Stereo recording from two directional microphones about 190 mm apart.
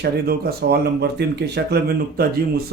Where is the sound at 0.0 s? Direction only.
55° right (ahead or behind).